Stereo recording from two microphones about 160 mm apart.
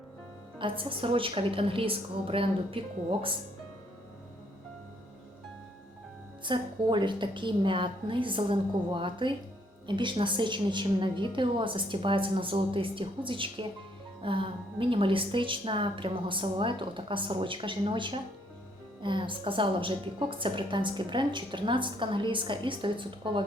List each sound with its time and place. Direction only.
0.6 s a woman's voice: 35° right (ahead or behind)
6.4 s a woman's voice: 30° right (ahead or behind)